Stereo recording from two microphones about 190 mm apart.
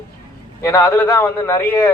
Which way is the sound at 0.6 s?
20° left (ahead or behind).